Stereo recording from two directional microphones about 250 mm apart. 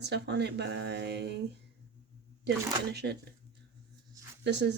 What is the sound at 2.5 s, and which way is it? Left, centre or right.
Speech, right.